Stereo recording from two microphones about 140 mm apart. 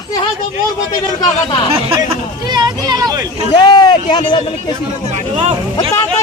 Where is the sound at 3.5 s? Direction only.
30° left (ahead or behind).